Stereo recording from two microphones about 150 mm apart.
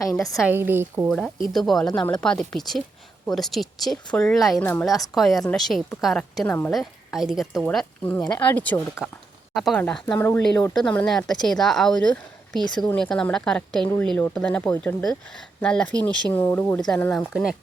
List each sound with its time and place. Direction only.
0.0 s a woman's voice: 20° left (ahead or behind)
0.4 s a woman's voice: 15° right (ahead or behind)
1.5 s a woman's voice: centre (ahead or behind)
4.6 s speech: 10° left (ahead or behind)
5.1 s a woman's voice: centre (ahead or behind)
9.0 s a woman's voice: 5° right (ahead or behind)
9.6 s speech: 5° left (ahead or behind)
10.8 s a woman's voice: 5° left (ahead or behind)